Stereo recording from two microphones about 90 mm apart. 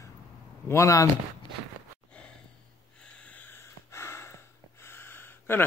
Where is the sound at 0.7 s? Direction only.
35° left (ahead or behind).